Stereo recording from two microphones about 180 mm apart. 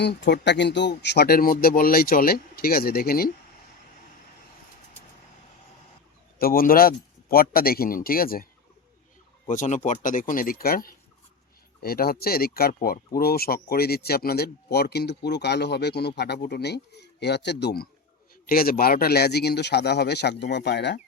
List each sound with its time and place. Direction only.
0.0 s speech: 70° left (ahead or behind)
6.4 s speech: 55° left (ahead or behind)
9.5 s speech: 45° left (ahead or behind); by 17.8 s 70° left (ahead or behind)
18.4 s speech: 55° left (ahead or behind); by 21.0 s 70° left (ahead or behind)